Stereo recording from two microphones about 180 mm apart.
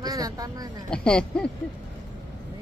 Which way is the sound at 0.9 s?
5° left (ahead or behind).